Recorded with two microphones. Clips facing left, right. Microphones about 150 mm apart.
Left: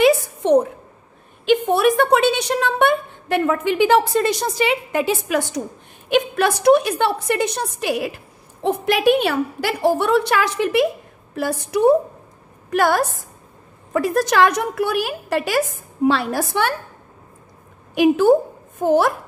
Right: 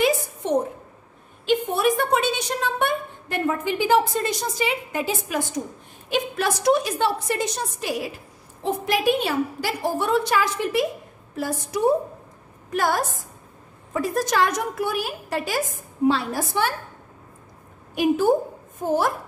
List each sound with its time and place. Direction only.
0.0 s a sound: 75° left (ahead or behind)
1.4 s a woman's voice: 70° left (ahead or behind)
17.9 s a woman's voice: 80° left